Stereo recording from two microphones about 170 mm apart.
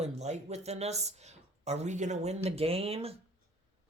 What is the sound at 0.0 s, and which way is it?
Speech, 40° right (ahead or behind).